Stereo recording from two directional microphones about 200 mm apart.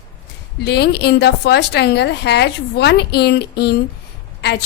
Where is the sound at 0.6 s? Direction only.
55° left (ahead or behind).